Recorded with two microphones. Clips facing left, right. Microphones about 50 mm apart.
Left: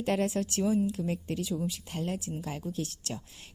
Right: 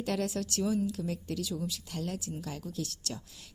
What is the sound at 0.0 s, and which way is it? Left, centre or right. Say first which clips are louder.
A woman's voice: left 4 dB; left.